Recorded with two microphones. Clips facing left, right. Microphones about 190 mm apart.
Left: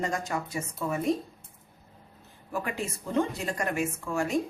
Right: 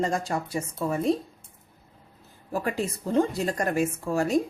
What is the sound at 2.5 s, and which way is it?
Speech, 35° right (ahead or behind).